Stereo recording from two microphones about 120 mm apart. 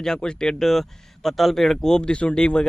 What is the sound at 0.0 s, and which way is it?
Speech, 5° left (ahead or behind).